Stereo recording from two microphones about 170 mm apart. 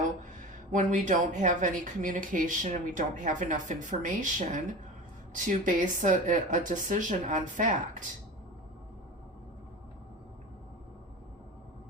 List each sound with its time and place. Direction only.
0.7 s speech: 50° right (ahead or behind)